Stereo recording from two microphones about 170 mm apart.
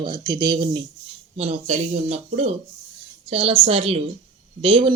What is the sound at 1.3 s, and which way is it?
Speech, 35° right (ahead or behind).